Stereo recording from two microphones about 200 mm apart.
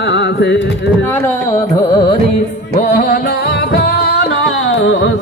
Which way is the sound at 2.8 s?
45° left (ahead or behind).